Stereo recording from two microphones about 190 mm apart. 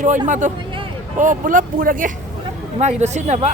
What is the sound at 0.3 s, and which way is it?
Speech, 40° right (ahead or behind).